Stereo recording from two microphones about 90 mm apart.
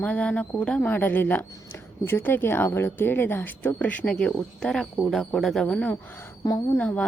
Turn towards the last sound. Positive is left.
turn(degrees=15)  # may be behind; listen again after turning